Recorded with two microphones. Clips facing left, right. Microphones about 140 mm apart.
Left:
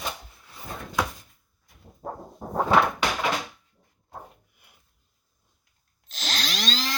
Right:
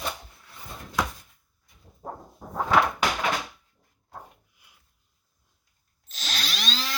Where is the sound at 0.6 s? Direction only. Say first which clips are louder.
Left 5 dB; 60° left (ahead or behind).